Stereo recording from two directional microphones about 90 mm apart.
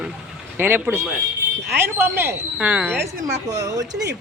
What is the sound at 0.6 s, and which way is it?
Speech, 25° right (ahead or behind).